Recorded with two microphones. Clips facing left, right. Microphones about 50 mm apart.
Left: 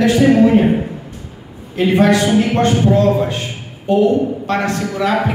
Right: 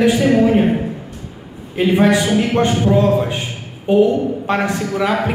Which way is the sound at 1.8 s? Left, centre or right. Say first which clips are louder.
Left 1 dB; centre.